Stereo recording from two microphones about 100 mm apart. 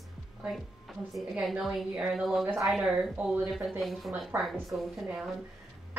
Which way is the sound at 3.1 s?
15° right (ahead or behind).